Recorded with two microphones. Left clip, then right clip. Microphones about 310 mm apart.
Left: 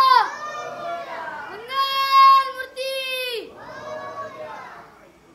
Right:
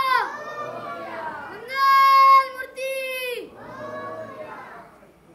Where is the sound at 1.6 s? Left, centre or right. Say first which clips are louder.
Right 6 dB; centre.